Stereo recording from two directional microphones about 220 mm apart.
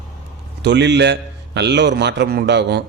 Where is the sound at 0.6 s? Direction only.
50° right (ahead or behind).